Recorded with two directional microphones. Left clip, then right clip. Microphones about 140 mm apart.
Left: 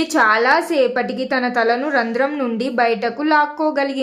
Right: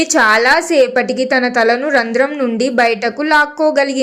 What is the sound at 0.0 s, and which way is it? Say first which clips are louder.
A woman's voice: right 4 dB; 25° right (ahead or behind).